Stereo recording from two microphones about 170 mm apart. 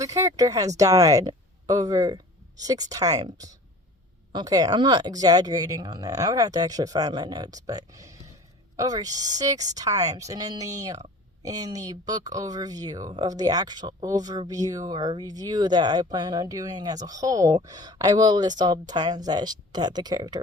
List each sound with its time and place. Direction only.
0.0 s speech: 20° right (ahead or behind)